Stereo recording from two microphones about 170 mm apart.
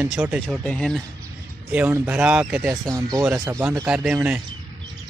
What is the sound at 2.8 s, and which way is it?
Speech, 20° right (ahead or behind).